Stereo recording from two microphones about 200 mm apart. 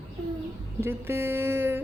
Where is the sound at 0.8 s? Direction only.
10° right (ahead or behind).